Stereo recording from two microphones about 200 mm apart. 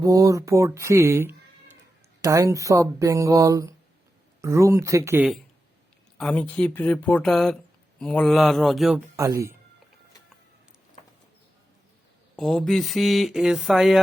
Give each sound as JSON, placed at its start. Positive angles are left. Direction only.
{"t": 0.0, "sound": "speech", "side_deg": -15}
{"t": 6.1, "sound": "speech", "side_deg": 5}
{"t": 9.1, "sound": "speech", "side_deg": -15}
{"t": 12.4, "sound": "speech", "side_deg": 0}